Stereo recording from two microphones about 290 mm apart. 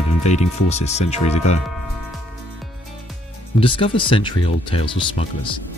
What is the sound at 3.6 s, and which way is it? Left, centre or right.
Speech, centre.